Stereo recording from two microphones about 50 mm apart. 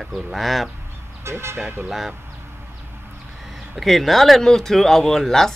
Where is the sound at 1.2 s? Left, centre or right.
Right.